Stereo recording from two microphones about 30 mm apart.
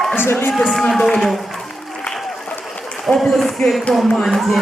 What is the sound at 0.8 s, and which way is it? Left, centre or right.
Speech, centre.